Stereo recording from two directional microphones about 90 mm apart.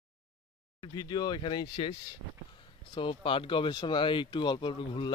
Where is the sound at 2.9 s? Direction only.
80° left.